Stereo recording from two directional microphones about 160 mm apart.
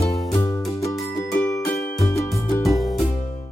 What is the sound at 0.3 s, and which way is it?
Music, 15° left (ahead or behind).